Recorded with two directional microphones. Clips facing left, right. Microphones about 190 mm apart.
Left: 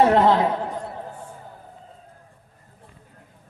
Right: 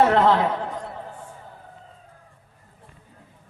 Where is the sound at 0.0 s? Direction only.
15° left (ahead or behind).